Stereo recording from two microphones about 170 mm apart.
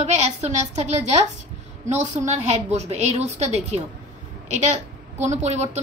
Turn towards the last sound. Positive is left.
turn(degrees=-40)  # may be behind; listen again after turning